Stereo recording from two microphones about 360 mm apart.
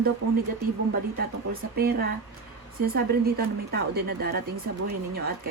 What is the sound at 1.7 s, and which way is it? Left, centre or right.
Speech, right.